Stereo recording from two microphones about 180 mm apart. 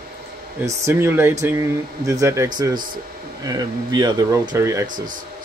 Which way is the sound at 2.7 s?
50° right (ahead or behind).